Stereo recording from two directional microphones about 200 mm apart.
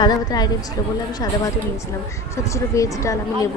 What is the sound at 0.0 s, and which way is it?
Speech, 20° left (ahead or behind).